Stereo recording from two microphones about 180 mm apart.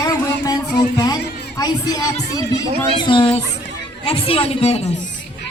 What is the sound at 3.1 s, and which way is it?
A woman's voice, 30° left (ahead or behind).